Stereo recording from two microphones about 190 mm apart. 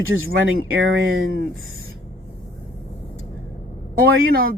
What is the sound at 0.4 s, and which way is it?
Speech, 90° right.